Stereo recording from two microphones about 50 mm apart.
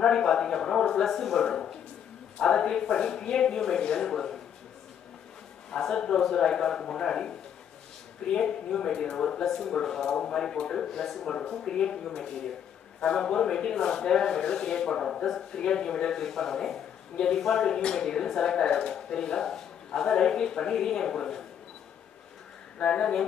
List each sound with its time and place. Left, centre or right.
0.0 s a sound: centre
1.0 s a woman's voice: centre
5.7 s a woman's voice: centre
22.8 s speech: centre